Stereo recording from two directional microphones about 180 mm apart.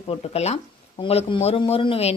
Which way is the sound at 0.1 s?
35° left (ahead or behind).